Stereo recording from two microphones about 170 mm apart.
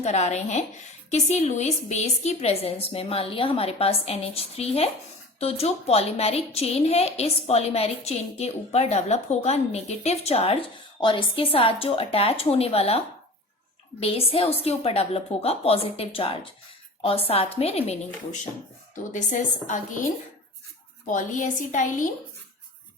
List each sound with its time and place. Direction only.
0.0 s a woman's voice: 40° left (ahead or behind)
14.0 s a woman's voice: 35° left (ahead or behind)
21.1 s a woman's voice: 50° left (ahead or behind)